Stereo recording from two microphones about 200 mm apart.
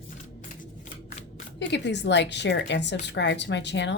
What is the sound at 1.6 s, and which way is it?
A woman's voice, 60° left (ahead or behind).